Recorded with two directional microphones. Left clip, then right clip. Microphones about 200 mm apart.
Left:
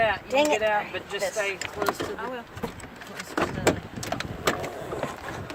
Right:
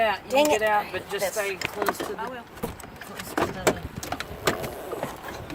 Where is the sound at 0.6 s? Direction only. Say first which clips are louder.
Right 1 dB; 40° right (ahead or behind).